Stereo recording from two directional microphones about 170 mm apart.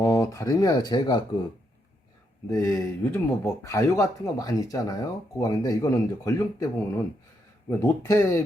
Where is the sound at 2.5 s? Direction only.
15° left (ahead or behind).